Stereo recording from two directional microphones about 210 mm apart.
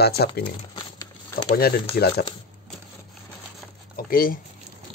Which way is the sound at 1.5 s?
50° left (ahead or behind).